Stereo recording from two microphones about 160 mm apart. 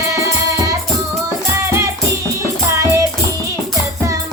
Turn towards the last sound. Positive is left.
turn(degrees=-20)  # may be behind; listen again after turning